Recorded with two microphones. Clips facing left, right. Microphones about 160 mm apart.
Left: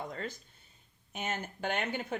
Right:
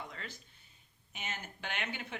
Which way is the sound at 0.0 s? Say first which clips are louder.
Left 7 dB; 45° left (ahead or behind).